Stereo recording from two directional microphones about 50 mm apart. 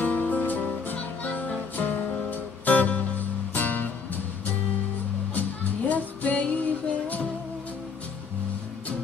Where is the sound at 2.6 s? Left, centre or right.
Left.